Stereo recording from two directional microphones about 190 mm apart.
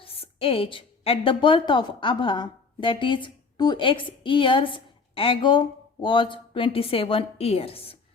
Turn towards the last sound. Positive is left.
turn(degrees=30)  # may be behind; listen again after turning